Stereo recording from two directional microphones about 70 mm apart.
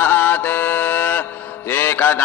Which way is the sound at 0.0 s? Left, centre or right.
Left.